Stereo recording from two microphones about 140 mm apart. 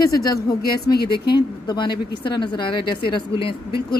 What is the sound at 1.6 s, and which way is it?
Speech, 30° left (ahead or behind).